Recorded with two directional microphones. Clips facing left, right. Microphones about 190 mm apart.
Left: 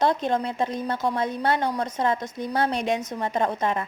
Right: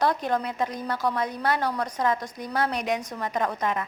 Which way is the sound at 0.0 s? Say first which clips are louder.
Left 2 dB; 25° left (ahead or behind).